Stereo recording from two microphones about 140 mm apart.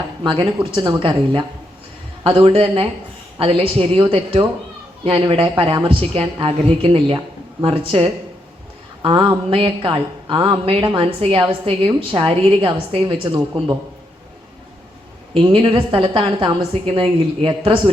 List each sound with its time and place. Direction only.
0.2 s a woman's voice: 35° right (ahead or behind)
15.5 s a woman's voice: 40° right (ahead or behind)